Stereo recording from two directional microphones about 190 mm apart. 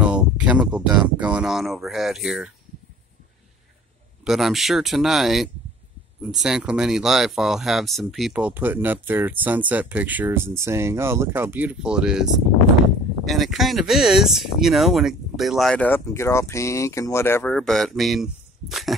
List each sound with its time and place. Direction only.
0.0 s speech: 5° right (ahead or behind)
4.2 s speech: centre (ahead or behind)